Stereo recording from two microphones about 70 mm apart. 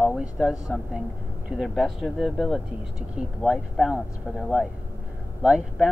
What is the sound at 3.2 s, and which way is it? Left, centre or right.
Speech, centre.